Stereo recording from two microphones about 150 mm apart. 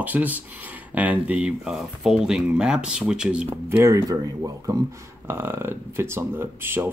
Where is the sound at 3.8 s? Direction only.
20° right (ahead or behind).